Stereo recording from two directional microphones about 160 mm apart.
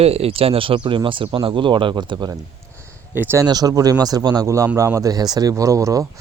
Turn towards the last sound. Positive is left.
turn(degrees=-20)  # may be behind; listen again after turning